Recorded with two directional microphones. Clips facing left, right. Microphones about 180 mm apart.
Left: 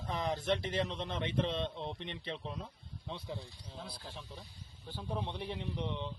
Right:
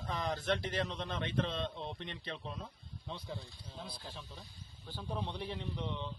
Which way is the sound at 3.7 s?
5° left (ahead or behind).